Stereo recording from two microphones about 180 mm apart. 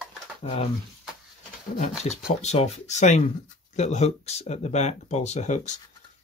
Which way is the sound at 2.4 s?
35° left (ahead or behind).